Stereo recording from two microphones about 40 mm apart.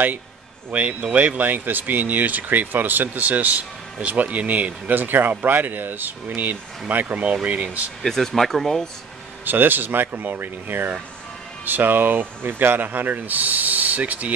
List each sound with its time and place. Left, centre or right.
0.7 s speech: right
8.0 s speech: centre
9.4 s speech: right